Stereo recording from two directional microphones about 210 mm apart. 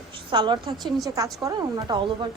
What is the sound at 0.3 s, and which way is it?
A woman's voice, 20° right (ahead or behind).